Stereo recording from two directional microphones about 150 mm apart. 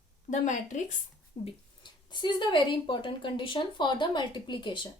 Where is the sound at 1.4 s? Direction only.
40° left (ahead or behind).